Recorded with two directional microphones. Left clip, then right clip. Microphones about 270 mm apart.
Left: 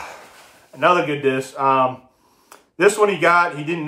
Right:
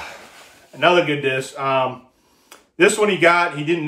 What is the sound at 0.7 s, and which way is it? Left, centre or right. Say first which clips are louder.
Speech: right 1 dB; centre.